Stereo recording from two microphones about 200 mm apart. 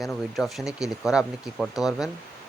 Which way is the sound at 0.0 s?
Centre (ahead or behind).